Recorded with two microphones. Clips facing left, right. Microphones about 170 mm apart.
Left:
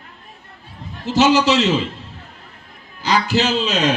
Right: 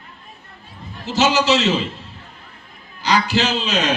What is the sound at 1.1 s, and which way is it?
Speech, 55° left (ahead or behind).